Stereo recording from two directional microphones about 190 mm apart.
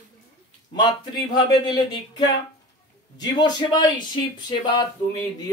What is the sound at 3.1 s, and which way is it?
Speech, 20° left (ahead or behind).